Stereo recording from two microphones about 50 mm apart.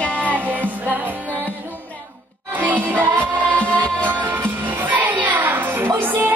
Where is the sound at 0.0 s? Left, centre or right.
Left.